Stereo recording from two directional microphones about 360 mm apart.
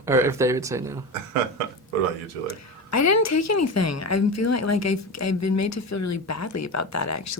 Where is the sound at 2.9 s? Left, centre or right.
Left.